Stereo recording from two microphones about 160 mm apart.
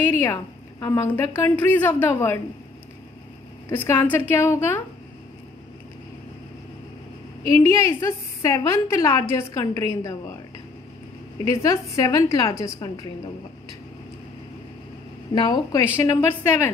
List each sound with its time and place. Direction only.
0.1 s a woman's voice: 15° left (ahead or behind)
3.6 s a woman's voice: 15° left (ahead or behind)
7.6 s a woman's voice: 15° left (ahead or behind)
11.4 s a woman's voice: 20° left (ahead or behind)
15.3 s a woman's voice: 25° left (ahead or behind)